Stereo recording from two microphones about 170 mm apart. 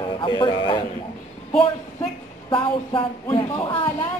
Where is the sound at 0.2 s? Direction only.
25° left (ahead or behind).